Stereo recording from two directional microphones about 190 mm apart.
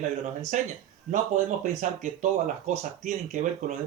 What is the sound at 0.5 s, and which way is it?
Speech, 40° right (ahead or behind).